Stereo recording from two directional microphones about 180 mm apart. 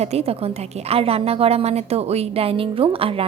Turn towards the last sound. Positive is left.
turn(degrees=-30)  # may be behind; listen again after turning